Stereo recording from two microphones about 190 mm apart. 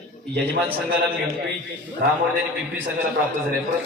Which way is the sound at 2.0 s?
50° right (ahead or behind).